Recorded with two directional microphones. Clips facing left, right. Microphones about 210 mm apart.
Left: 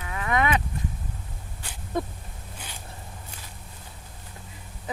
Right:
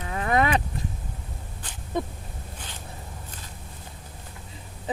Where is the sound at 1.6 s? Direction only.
10° left (ahead or behind).